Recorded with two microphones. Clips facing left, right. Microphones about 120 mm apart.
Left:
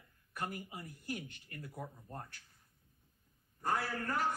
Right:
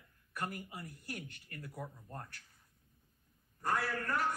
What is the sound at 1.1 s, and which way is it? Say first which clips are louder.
Speech: left 6 dB; 45° right (ahead or behind).